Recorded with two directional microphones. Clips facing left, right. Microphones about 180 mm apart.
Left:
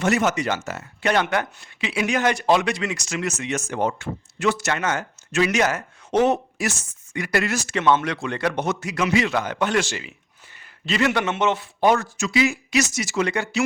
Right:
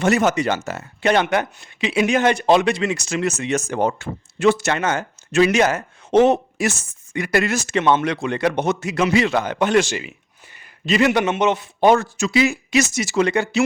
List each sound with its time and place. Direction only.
0.0 s speech: 35° right (ahead or behind)
2.9 s speech: 35° right (ahead or behind)